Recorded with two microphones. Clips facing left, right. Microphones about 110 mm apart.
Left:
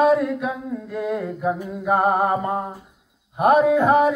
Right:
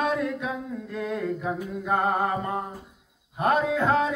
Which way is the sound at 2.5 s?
35° left (ahead or behind).